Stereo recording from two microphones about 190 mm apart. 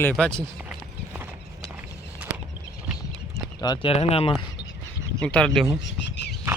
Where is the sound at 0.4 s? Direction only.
10° right (ahead or behind).